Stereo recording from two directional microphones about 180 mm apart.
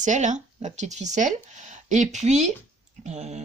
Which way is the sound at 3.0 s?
40° right (ahead or behind).